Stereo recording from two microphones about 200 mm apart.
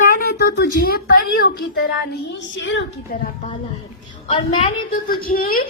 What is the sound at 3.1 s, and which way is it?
Speech, 50° left (ahead or behind).